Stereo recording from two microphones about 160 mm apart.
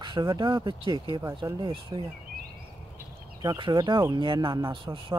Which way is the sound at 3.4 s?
25° right (ahead or behind).